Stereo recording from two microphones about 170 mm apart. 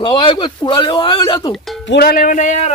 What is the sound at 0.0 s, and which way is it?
Speech, 30° left (ahead or behind).